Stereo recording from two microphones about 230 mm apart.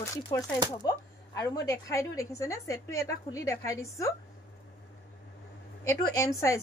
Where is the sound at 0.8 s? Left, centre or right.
Centre.